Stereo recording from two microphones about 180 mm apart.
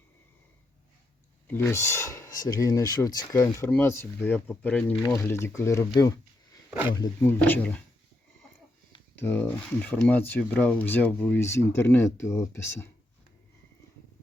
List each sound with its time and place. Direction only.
1.5 s speech: 10° left (ahead or behind)
6.9 s speech: 20° left (ahead or behind)
9.1 s speech: 10° left (ahead or behind)